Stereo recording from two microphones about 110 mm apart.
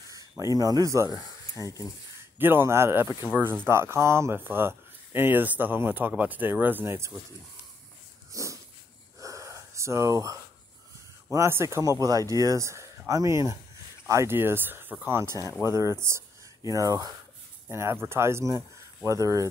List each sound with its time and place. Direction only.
0.1 s speech: 30° right (ahead or behind)
2.3 s speech: 20° right (ahead or behind)
8.3 s dog: 30° right (ahead or behind)
9.2 s snort: 30° right (ahead or behind)
11.3 s speech: 25° right (ahead or behind)